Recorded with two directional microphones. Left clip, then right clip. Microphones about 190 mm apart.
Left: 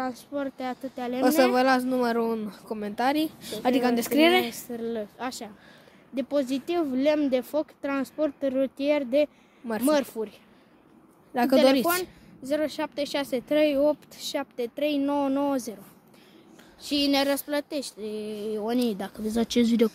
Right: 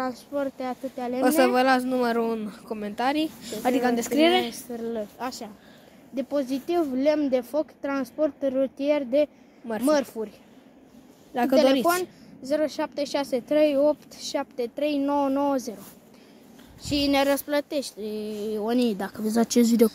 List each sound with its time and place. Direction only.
0.3 s speech: 20° left (ahead or behind)
4.6 s speech: 20° left (ahead or behind)
11.6 s speech: 35° left (ahead or behind)
12.4 s speech: 15° left (ahead or behind)
16.8 s speech: 10° left (ahead or behind)